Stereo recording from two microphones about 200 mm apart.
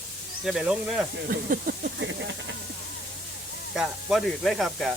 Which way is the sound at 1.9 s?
65° right (ahead or behind).